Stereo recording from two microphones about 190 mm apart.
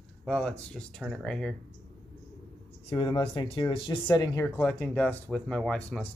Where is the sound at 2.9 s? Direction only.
25° left (ahead or behind).